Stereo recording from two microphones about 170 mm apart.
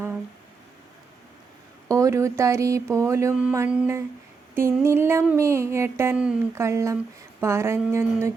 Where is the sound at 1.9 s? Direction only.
20° right (ahead or behind).